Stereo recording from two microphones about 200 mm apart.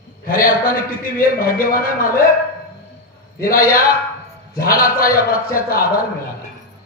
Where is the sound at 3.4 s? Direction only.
45° left (ahead or behind).